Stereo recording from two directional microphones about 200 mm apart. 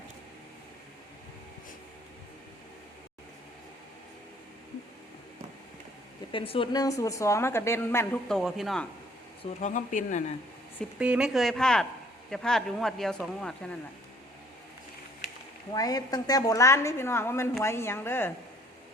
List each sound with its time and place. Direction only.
6.3 s a woman's voice: 25° left (ahead or behind)
8.3 s speech: centre (ahead or behind)
9.4 s speech: 35° left (ahead or behind)
10.9 s speech: 5° right (ahead or behind)
15.7 s a woman's voice: 20° left (ahead or behind)